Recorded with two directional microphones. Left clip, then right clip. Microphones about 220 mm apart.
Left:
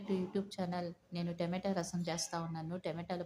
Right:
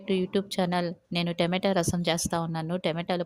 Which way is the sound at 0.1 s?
35° right (ahead or behind).